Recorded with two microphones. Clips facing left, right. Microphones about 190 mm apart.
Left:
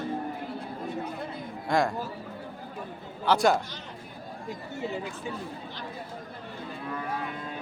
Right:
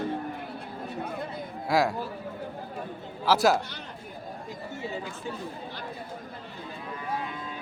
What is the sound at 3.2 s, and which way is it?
Speech, centre (ahead or behind).